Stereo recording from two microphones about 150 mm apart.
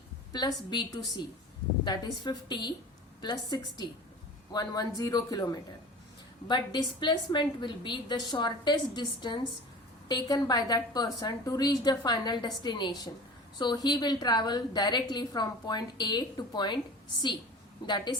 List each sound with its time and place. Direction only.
0.3 s a woman's voice: 30° left (ahead or behind)
17.8 s a woman's voice: 30° left (ahead or behind)